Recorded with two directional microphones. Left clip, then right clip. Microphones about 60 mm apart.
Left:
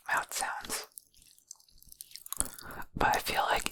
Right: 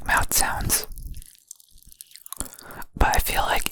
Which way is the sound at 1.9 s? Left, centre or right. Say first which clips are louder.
Right 2 dB; centre.